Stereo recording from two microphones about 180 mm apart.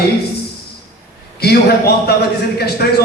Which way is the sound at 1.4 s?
60° left (ahead or behind).